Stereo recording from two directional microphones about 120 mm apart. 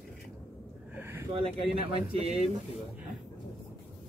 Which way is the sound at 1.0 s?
20° right (ahead or behind).